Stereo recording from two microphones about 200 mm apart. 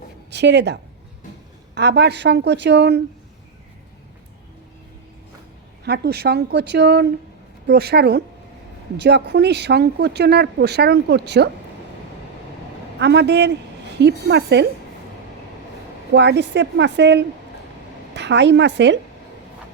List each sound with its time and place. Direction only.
0.3 s speech: 60° right (ahead or behind)
5.8 s a woman's voice: 55° right (ahead or behind)
13.0 s speech: 60° right (ahead or behind)
16.1 s speech: 60° right (ahead or behind)